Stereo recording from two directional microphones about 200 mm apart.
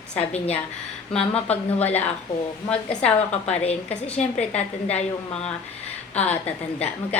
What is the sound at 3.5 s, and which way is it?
Speech, 30° left (ahead or behind).